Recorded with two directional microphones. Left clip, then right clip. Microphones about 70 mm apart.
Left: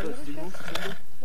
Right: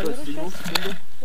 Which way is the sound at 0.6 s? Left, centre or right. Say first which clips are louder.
Right 8 dB; left.